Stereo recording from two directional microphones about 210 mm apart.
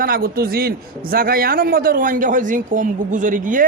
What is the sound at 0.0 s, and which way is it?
A man's voice, 45° right (ahead or behind).